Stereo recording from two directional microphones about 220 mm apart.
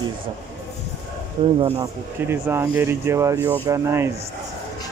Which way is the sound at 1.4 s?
25° right (ahead or behind).